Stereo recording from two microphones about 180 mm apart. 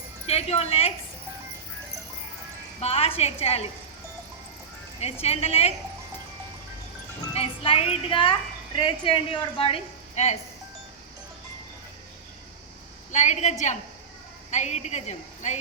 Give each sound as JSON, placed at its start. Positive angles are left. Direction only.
{"t": 0.3, "sound": "a woman's voice", "side_deg": 35}
{"t": 2.8, "sound": "a woman's voice", "side_deg": 35}
{"t": 5.2, "sound": "a woman's voice", "side_deg": 35}
{"t": 7.3, "sound": "a woman's voice", "side_deg": 30}
{"t": 13.1, "sound": "a woman's voice", "side_deg": 40}